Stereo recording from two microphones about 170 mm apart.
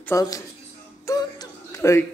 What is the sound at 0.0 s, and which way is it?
Speech, 20° left (ahead or behind).